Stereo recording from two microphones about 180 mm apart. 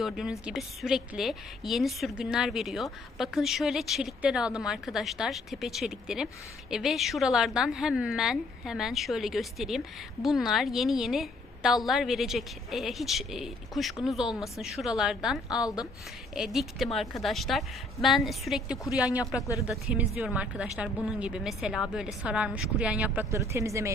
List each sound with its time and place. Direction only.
0.0 s a woman's voice: 5° right (ahead or behind)
19.4 s speech: 15° left (ahead or behind)
19.6 s speech: 5° right (ahead or behind)